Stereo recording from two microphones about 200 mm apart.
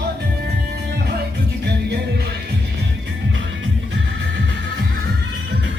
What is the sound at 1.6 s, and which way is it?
Music, 55° right (ahead or behind).